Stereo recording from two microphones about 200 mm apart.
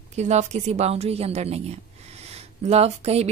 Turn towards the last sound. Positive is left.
turn(degrees=-30)  # may be behind; listen again after turning